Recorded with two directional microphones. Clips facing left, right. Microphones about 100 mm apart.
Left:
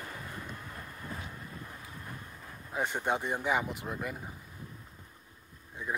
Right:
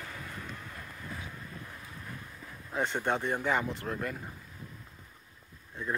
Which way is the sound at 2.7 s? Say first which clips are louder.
Right 1 dB; 10° left (ahead or behind).